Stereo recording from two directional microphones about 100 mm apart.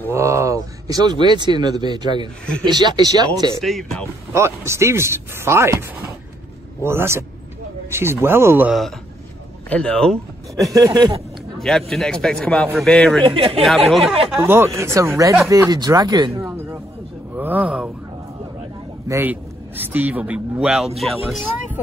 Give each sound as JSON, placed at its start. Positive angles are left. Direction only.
{"t": 0.1, "sound": "speech", "side_deg": -30}
{"t": 3.5, "sound": "speech", "side_deg": 5}
{"t": 4.3, "sound": "speech", "side_deg": -25}
{"t": 9.7, "sound": "a man's voice", "side_deg": 10}
{"t": 10.5, "sound": "speech", "side_deg": -35}
{"t": 11.5, "sound": "a sound", "side_deg": 0}
{"t": 11.9, "sound": "a man's voice", "side_deg": 5}
{"t": 13.2, "sound": "speech", "side_deg": -65}
{"t": 13.6, "sound": "speech", "side_deg": 0}
{"t": 14.4, "sound": "speech", "side_deg": -25}
{"t": 17.4, "sound": "speech", "side_deg": -15}
{"t": 19.2, "sound": "a man's voice", "side_deg": -20}